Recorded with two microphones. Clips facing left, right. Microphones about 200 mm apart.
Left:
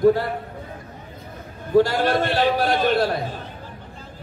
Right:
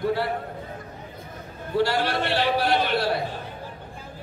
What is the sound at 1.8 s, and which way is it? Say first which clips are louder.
A man's voice: left 6 dB; 45° left (ahead or behind).